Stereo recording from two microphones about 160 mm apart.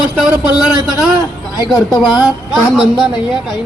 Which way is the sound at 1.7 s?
Centre (ahead or behind).